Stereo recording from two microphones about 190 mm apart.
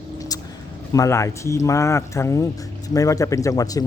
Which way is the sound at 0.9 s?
15° left (ahead or behind).